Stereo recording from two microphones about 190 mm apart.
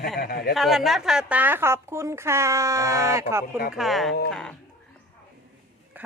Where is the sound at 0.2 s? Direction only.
55° left (ahead or behind).